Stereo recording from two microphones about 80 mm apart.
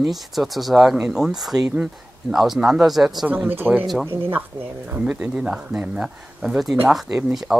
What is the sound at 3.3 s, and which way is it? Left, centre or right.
Speech, right.